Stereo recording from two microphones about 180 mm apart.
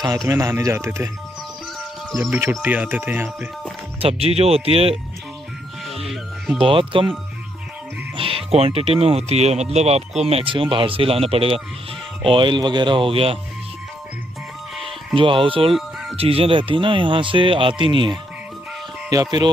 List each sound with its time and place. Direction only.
0.0 s speech: 20° right (ahead or behind)
2.1 s speech: 10° right (ahead or behind)
4.0 s speech: 35° right (ahead or behind)
6.0 s speech: centre (ahead or behind)
6.6 s speech: 30° right (ahead or behind)
8.2 s speech: 30° right (ahead or behind)
15.1 s speech: 30° right (ahead or behind)